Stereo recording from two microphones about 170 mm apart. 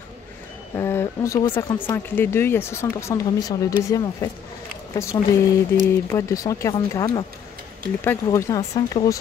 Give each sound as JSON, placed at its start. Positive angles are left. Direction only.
{"t": 0.7, "sound": "speech", "side_deg": 15}